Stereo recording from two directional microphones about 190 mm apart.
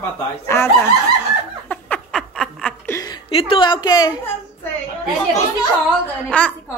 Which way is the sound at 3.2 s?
30° left (ahead or behind).